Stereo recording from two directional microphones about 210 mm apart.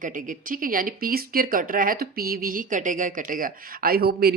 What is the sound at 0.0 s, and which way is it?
Speech, 40° right (ahead or behind).